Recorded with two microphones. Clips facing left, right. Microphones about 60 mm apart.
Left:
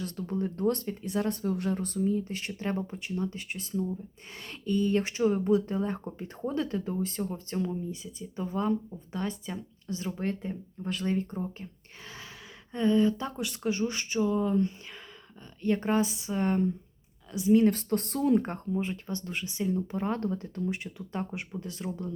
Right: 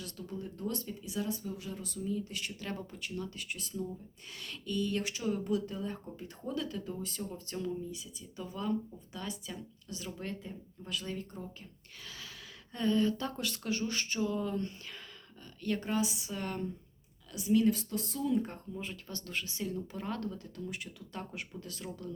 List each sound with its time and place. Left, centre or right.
0.0 s speech: left; by 14.7 s centre
15.6 s speech: left
17.6 s speech: left
18.7 s speech: left